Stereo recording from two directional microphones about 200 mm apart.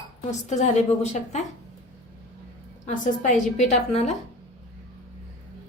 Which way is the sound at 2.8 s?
40° left (ahead or behind).